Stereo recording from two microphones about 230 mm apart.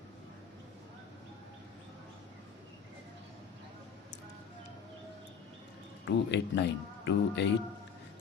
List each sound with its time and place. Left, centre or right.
6.1 s speech: left